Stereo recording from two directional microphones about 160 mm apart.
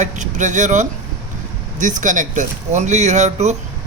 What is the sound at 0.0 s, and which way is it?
Speech, 50° right (ahead or behind).